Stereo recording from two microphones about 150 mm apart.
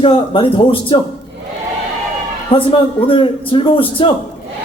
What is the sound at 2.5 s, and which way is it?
A man's voice, 35° left (ahead or behind).